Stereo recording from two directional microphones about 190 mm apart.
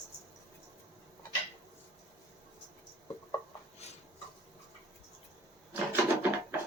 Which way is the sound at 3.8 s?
35° left (ahead or behind).